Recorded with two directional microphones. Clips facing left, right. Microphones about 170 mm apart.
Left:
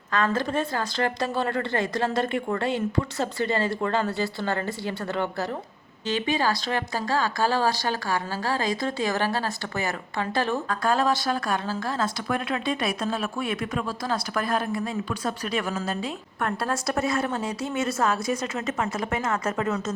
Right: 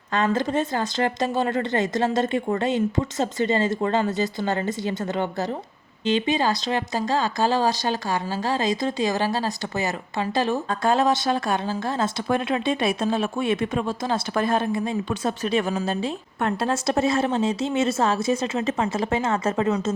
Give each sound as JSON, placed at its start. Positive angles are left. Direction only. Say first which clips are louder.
{"t": 0.1, "sound": "speech", "louder": "right 2 dB", "side_deg": -20}